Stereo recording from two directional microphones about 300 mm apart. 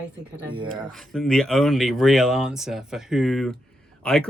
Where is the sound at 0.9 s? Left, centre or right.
Centre.